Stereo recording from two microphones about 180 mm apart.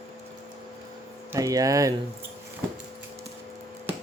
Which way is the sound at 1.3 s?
20° right (ahead or behind).